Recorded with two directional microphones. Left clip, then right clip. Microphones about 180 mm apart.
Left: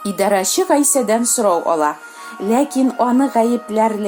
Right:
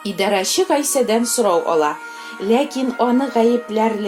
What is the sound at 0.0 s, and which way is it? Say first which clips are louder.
Speech: left 2 dB; 50° left (ahead or behind).